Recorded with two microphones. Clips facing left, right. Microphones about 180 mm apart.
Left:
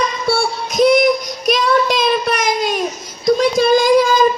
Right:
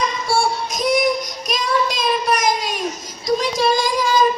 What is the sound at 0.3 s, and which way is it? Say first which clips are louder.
Child singing: even; 60° left (ahead or behind).